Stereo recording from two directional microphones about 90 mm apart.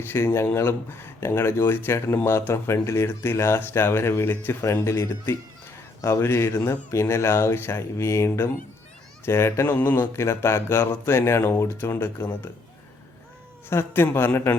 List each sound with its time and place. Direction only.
0.0 s speech: 25° left (ahead or behind)
13.7 s speech: 25° left (ahead or behind)